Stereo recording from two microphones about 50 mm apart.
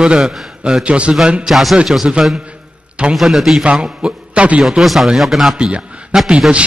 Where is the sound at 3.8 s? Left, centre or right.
Right.